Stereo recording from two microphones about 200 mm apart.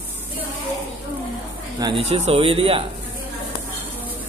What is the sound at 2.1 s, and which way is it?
Speech, 30° right (ahead or behind).